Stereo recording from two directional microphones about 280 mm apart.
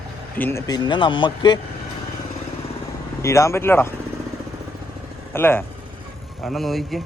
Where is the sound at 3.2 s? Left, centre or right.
Centre.